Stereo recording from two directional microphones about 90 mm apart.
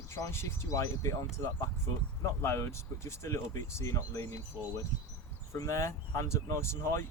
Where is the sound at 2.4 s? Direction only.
25° left (ahead or behind).